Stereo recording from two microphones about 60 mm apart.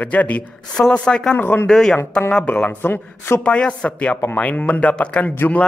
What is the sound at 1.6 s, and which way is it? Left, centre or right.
Speech, centre.